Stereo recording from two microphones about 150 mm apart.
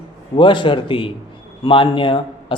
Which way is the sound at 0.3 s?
30° left (ahead or behind).